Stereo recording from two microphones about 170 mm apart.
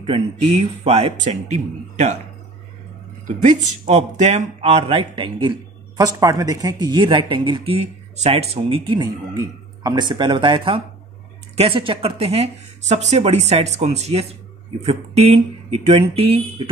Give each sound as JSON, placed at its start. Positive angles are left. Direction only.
{"t": 0.8, "sound": "speech", "side_deg": -40}
{"t": 3.4, "sound": "a man's voice", "side_deg": -40}